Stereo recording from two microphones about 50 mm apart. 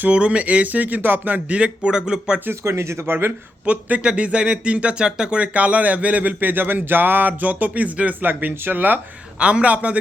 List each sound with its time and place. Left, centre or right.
0.1 s speech: right
1.5 s speech: right
2.5 s speech: right
3.7 s speech: right
8.3 s speech: right
9.4 s speech: right